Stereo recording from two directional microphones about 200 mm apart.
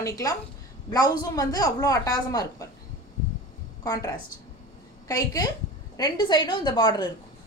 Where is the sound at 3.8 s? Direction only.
20° left (ahead or behind).